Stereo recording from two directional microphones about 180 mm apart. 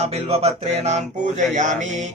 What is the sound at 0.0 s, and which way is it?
Speech, 35° right (ahead or behind).